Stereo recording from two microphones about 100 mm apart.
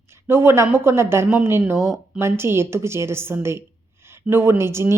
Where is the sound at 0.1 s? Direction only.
25° right (ahead or behind).